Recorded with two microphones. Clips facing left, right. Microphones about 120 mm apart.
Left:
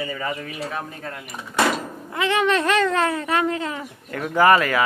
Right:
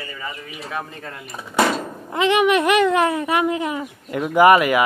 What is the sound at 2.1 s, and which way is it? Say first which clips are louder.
A man's voice: right 4 dB; 15° right (ahead or behind).